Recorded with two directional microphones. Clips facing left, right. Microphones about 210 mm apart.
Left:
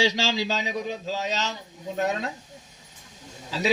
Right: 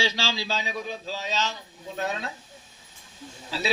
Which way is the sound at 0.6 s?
20° left (ahead or behind).